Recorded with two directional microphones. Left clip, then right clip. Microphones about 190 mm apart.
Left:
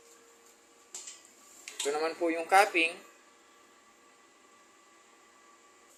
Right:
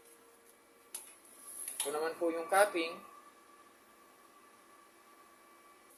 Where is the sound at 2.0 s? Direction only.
20° left (ahead or behind).